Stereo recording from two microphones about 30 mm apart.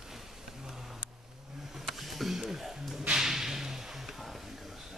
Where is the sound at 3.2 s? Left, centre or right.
Centre.